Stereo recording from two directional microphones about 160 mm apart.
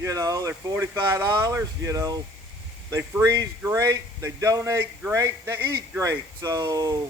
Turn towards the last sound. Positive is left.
turn(degrees=-20)  # may be behind; listen again after turning